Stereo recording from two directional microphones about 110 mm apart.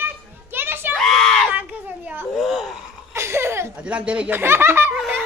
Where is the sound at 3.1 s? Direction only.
25° right (ahead or behind).